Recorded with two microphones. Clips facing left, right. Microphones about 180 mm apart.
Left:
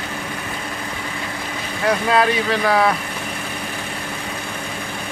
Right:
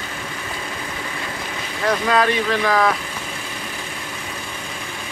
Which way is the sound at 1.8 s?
10° left (ahead or behind).